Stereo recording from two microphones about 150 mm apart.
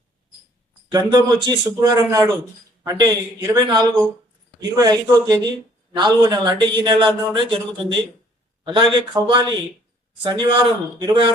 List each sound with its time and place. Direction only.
0.9 s a man's voice: 25° right (ahead or behind)